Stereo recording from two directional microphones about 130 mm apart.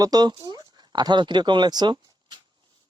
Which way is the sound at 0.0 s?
30° right (ahead or behind).